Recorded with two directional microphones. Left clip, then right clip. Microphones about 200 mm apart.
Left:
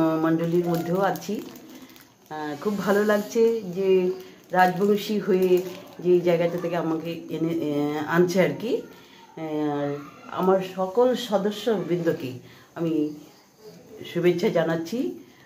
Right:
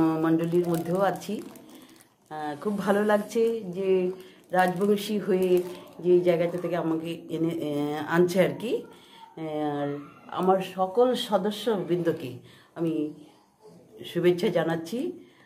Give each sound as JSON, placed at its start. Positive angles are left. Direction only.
{"t": 0.0, "sound": "speech", "side_deg": -10}
{"t": 14.1, "sound": "speech", "side_deg": -15}